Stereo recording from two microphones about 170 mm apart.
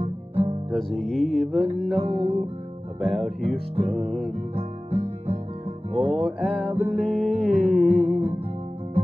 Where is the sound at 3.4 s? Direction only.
35° right (ahead or behind).